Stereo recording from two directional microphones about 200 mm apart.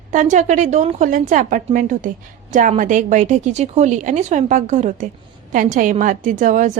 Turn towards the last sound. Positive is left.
turn(degrees=-40)  # may be behind; listen again after turning